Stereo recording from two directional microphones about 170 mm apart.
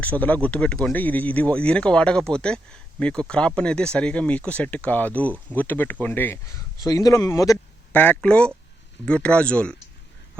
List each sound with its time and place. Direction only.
0.0 s speech: 10° left (ahead or behind)